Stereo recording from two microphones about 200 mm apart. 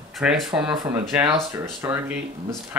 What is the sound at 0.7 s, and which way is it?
Speech, 15° right (ahead or behind).